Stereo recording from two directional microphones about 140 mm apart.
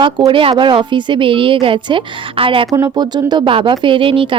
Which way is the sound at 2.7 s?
25° right (ahead or behind).